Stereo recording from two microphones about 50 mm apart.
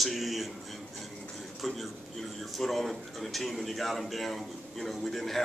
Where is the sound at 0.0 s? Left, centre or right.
Centre.